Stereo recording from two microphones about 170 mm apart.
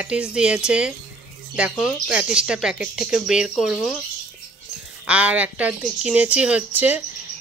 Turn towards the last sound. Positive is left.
turn(degrees=-10)  # may be behind; listen again after turning